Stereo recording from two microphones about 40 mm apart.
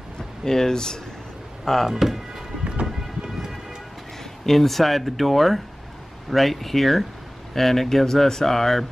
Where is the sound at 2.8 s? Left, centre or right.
Right.